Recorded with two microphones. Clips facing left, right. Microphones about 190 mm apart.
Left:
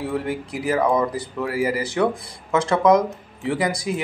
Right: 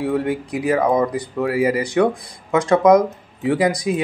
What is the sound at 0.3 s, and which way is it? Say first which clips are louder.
Speech: right 4 dB; 20° right (ahead or behind).